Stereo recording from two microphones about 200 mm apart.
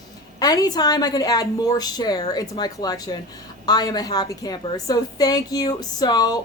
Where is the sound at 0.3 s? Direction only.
20° left (ahead or behind).